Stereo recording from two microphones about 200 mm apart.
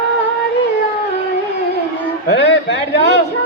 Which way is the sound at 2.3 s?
60° left (ahead or behind).